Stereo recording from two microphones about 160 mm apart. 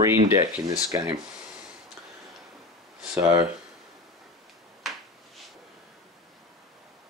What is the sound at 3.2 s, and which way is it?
Speech, 20° right (ahead or behind).